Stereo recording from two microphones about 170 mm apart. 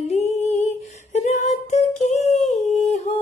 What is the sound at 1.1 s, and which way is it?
Female singing, 45° left (ahead or behind).